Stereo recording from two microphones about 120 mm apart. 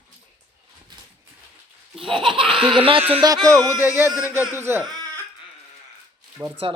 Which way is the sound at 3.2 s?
35° right (ahead or behind).